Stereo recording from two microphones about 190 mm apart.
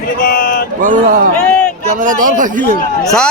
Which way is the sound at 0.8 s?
45° right (ahead or behind).